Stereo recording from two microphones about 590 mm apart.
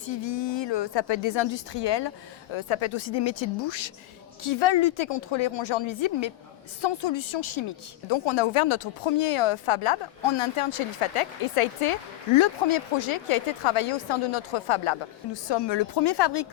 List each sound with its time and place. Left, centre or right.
0.0 s a woman's voice: left